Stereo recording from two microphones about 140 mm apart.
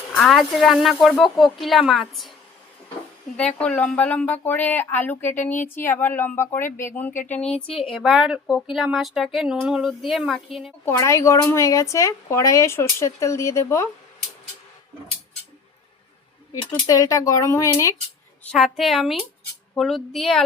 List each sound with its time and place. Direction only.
0.1 s speech: centre (ahead or behind)
3.3 s speech: 10° left (ahead or behind)
10.8 s speech: 20° left (ahead or behind)
16.7 s speech: 25° left (ahead or behind)
18.5 s speech: centre (ahead or behind)